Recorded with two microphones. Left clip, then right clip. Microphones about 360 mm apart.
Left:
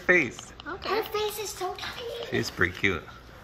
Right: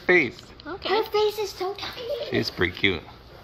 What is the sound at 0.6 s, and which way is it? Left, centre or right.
A child's voice, right.